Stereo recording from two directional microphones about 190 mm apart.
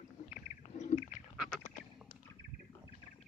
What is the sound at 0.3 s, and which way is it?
Owl, 40° left (ahead or behind).